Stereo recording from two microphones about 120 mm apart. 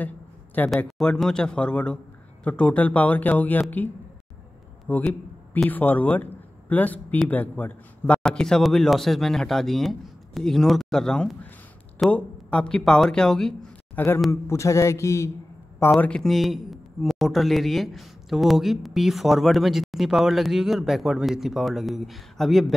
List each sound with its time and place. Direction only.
0.7 s speech: 5° left (ahead or behind)
4.8 s a sound: 15° left (ahead or behind)
5.7 s speech: 15° left (ahead or behind)
13.9 s a man's voice: 20° left (ahead or behind)
16.0 s speech: 5° left (ahead or behind)